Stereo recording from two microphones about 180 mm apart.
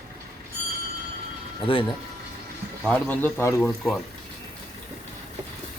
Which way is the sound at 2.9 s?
10° left (ahead or behind).